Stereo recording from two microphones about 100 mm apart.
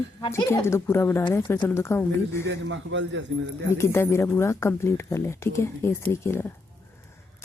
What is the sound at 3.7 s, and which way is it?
Speech, 25° left (ahead or behind).